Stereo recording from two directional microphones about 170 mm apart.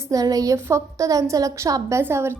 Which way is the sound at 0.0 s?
20° right (ahead or behind).